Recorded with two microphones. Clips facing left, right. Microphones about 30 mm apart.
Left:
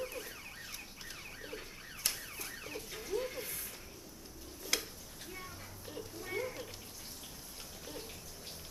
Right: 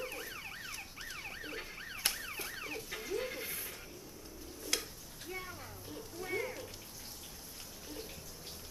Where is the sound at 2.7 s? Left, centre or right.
Centre.